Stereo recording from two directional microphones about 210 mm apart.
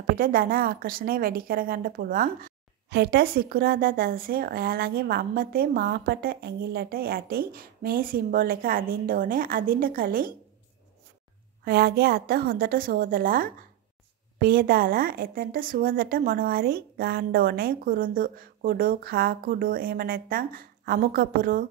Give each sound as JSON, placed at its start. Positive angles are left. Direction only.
{"t": 0.1, "sound": "a woman's voice", "side_deg": -40}
{"t": 11.6, "sound": "a woman's voice", "side_deg": -50}